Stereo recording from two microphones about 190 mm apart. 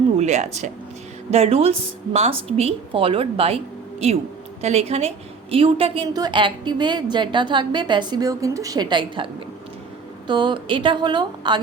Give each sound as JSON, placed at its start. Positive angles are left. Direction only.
{"t": 0.2, "sound": "a woman's voice", "side_deg": -35}
{"t": 4.6, "sound": "a woman's voice", "side_deg": -35}